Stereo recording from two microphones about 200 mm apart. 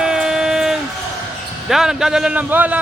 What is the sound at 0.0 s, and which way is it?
Train, 5° right (ahead or behind).